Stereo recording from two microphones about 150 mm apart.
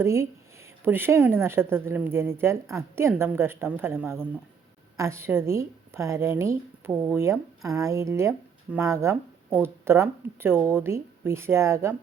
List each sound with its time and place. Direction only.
0.0 s a woman's voice: 20° right (ahead or behind)